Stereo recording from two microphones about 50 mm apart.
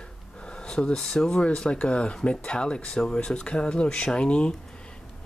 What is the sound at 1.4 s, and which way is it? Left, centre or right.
Speech, left.